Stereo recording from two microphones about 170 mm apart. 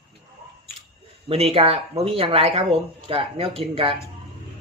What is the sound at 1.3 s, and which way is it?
Speech, 35° right (ahead or behind).